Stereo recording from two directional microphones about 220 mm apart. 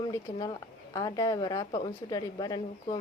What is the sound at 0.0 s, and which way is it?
A woman's voice, 20° left (ahead or behind).